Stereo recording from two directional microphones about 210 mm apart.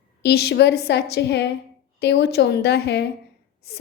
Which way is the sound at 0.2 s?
50° left (ahead or behind).